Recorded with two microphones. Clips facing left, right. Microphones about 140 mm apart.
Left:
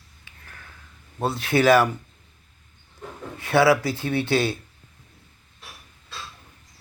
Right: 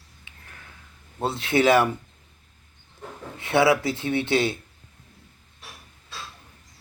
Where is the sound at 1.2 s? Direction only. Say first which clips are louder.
Left 1 dB; 25° right (ahead or behind).